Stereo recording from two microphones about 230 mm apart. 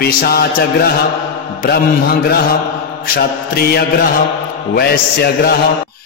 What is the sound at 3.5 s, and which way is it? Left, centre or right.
Music, left.